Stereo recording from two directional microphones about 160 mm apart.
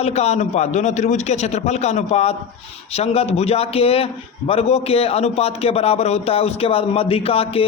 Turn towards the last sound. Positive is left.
turn(degrees=35)  # may be behind; listen again after turning